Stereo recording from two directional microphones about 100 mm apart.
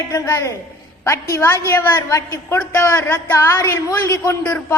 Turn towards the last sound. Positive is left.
turn(degrees=30)  # may be behind; listen again after turning